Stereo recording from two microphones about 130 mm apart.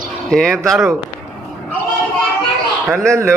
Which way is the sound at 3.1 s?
20° right (ahead or behind).